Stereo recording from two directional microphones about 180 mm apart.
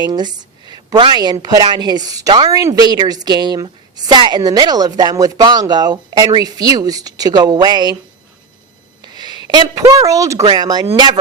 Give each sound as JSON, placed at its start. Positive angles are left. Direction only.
{"t": 0.0, "sound": "a woman's voice", "side_deg": -25}
{"t": 9.1, "sound": "a sound", "side_deg": -25}
{"t": 9.5, "sound": "a woman's voice", "side_deg": -20}